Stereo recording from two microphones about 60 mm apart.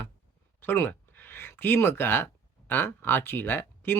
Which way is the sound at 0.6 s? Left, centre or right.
Left.